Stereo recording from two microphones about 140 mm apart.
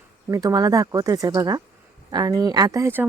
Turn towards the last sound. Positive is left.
turn(degrees=-20)  # may be behind; listen again after turning